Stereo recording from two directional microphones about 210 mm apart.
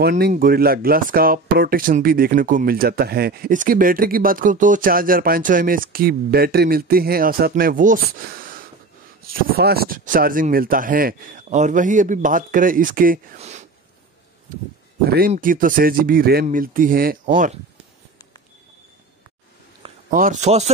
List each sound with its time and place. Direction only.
0.0 s speech: 40° right (ahead or behind)
15.3 s speech: 40° right (ahead or behind)
20.1 s speech: 40° right (ahead or behind)